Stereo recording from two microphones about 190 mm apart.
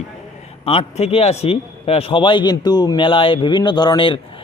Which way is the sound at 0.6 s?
30° left (ahead or behind).